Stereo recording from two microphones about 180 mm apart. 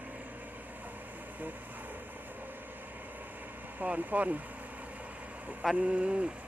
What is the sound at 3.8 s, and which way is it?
Speech, 10° right (ahead or behind).